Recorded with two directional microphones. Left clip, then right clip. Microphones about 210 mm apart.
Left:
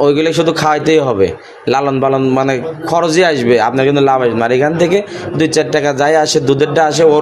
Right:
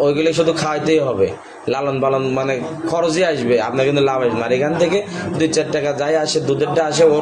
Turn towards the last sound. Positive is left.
turn(degrees=50)  # may be behind; listen again after turning